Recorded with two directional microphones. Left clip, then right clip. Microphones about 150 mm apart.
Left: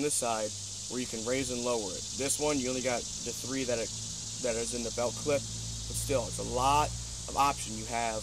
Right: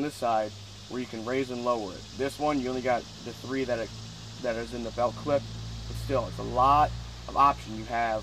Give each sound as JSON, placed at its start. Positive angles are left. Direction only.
{"t": 0.0, "sound": "speech", "side_deg": 65}
{"t": 6.6, "sound": "speech", "side_deg": 65}